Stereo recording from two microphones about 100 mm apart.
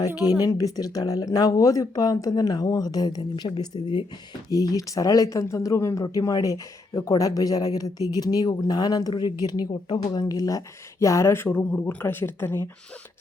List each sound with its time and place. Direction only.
0.4 s speech: 40° left (ahead or behind); by 12.6 s 20° left (ahead or behind)